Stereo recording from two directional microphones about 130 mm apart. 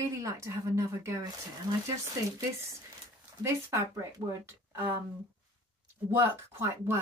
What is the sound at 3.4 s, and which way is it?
Speech, 20° right (ahead or behind).